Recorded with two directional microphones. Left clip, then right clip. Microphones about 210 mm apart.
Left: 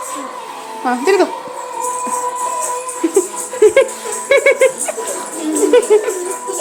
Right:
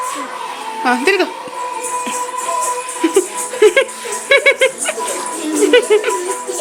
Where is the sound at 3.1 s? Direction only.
5° left (ahead or behind).